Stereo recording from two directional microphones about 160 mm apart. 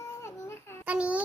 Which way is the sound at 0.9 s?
10° right (ahead or behind).